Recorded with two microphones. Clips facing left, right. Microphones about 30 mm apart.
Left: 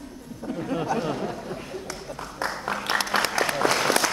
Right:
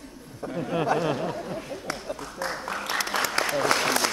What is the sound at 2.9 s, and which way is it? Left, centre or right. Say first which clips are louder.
Applause: left 3 dB; left.